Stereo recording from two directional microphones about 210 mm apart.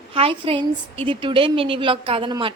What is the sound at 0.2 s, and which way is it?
A woman's voice, 25° right (ahead or behind).